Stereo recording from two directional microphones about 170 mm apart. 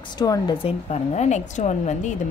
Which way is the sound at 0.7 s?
40° left (ahead or behind).